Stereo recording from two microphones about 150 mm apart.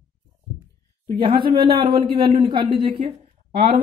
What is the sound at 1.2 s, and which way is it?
A woman's voice, 35° right (ahead or behind).